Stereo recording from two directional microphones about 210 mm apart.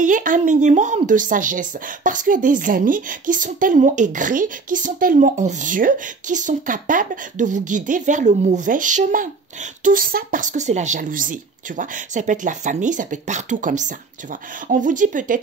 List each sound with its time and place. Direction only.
0.0 s a woman's voice: 40° right (ahead or behind)